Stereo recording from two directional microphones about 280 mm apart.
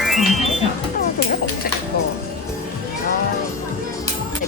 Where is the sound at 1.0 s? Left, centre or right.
Left.